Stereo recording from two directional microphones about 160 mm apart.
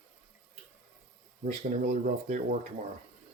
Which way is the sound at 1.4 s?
45° right (ahead or behind).